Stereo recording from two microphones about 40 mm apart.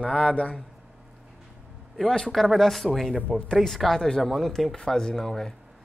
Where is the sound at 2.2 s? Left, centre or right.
Centre.